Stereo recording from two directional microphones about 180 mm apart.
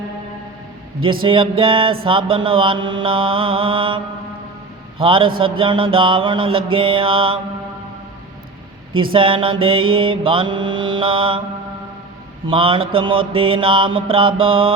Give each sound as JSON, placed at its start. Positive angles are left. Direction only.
{"t": 1.2, "sound": "mantra", "side_deg": -30}
{"t": 9.1, "sound": "mantra", "side_deg": -30}
{"t": 12.5, "sound": "mantra", "side_deg": -30}